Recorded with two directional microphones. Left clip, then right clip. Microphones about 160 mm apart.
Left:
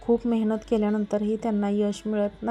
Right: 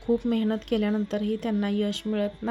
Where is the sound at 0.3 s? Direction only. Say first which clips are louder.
Left 2 dB; centre (ahead or behind).